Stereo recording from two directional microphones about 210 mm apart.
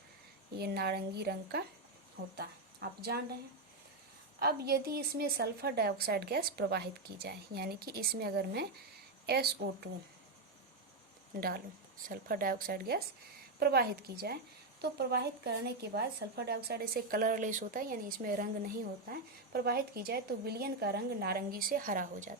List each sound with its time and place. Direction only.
0.6 s a woman's voice: 50° right (ahead or behind)
2.8 s a woman's voice: 50° right (ahead or behind)
4.4 s a woman's voice: 50° right (ahead or behind)
11.3 s a woman's voice: 45° right (ahead or behind)